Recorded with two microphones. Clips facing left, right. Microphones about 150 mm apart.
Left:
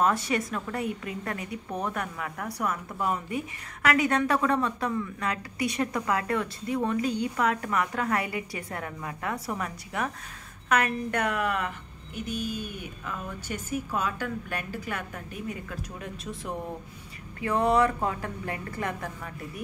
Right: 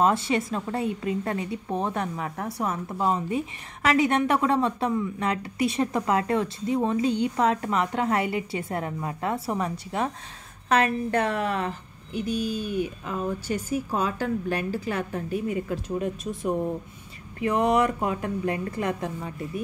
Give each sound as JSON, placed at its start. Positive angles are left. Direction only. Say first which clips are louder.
{"t": 0.0, "sound": "a woman's voice", "louder": "right 3 dB", "side_deg": -25}